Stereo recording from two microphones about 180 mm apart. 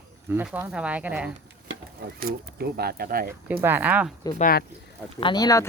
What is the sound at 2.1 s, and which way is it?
Speech, 55° right (ahead or behind).